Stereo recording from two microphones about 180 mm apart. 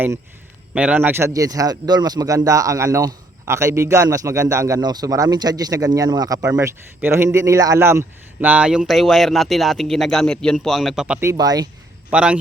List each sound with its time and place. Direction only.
0.7 s speech: 5° right (ahead or behind)
11.2 s speech: 20° right (ahead or behind)
12.1 s speech: 5° right (ahead or behind)